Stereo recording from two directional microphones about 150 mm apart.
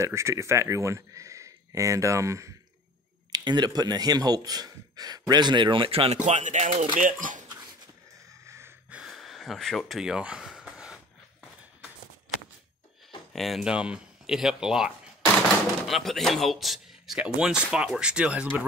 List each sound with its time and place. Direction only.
0.0 s speech: 20° right (ahead or behind); by 7.4 s 60° right (ahead or behind)
8.5 s snort: 15° right (ahead or behind)
9.0 s a sound: centre (ahead or behind)
13.3 s speech: centre (ahead or behind)
15.9 s speech: centre (ahead or behind)